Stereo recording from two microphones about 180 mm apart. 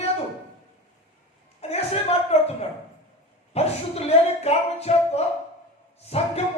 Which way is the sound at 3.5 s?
35° left (ahead or behind).